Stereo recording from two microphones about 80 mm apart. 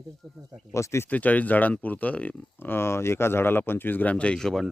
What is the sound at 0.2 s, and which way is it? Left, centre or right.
Speech, right.